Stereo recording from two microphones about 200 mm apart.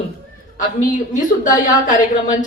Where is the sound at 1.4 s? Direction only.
40° left (ahead or behind).